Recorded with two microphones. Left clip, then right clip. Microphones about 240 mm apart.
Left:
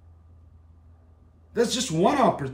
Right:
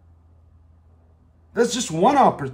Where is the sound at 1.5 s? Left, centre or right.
Centre.